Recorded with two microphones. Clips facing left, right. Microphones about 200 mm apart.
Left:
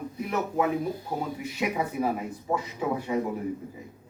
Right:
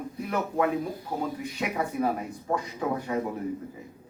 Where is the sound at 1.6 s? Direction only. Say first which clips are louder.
Even; 10° left (ahead or behind).